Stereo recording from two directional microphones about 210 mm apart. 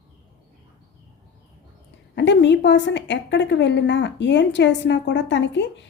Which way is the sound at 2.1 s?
55° left (ahead or behind).